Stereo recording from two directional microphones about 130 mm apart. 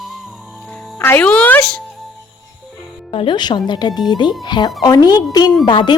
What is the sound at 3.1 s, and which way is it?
A woman's voice, 40° left (ahead or behind).